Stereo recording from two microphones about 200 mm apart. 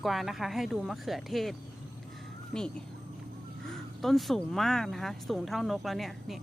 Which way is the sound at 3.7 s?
Centre (ahead or behind).